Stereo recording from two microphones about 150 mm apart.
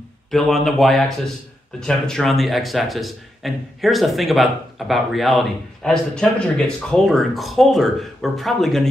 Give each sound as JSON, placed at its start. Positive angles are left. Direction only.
{"t": 0.3, "sound": "a man's voice", "side_deg": 0}